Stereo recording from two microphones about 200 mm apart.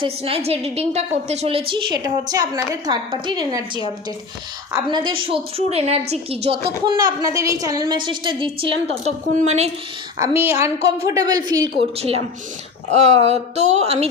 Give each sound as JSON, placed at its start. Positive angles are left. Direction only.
{"t": 0.0, "sound": "a woman's voice", "side_deg": -30}
{"t": 4.9, "sound": "a woman's voice", "side_deg": -25}
{"t": 6.8, "sound": "a woman's voice", "side_deg": -20}
{"t": 10.2, "sound": "a woman's voice", "side_deg": -10}